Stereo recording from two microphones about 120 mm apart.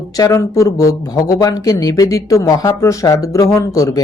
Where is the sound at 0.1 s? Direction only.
30° left (ahead or behind).